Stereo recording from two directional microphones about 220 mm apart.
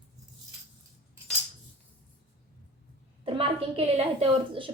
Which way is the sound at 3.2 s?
25° right (ahead or behind).